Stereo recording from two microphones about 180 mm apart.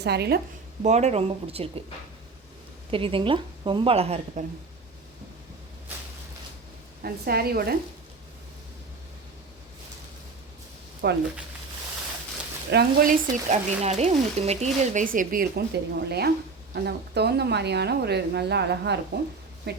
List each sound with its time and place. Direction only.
0.0 s speech: 65° right (ahead or behind)
0.8 s speech: 40° right (ahead or behind)
2.9 s a woman's voice: 30° right (ahead or behind)
7.0 s speech: 60° right (ahead or behind)
11.0 s speech: 65° right (ahead or behind)
12.7 s speech: 55° right (ahead or behind)
13.5 s a woman's voice: 40° right (ahead or behind); by 19.8 s 65° right (ahead or behind)